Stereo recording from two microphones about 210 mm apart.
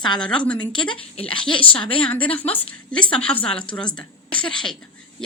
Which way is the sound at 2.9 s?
5° left (ahead or behind).